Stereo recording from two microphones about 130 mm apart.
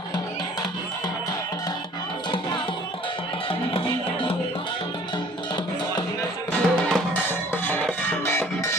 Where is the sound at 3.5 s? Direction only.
45° left (ahead or behind).